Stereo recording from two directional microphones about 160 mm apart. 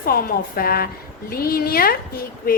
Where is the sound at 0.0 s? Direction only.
65° left (ahead or behind).